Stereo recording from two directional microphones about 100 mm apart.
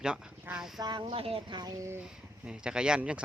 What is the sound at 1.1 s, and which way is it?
Speech, 75° right (ahead or behind).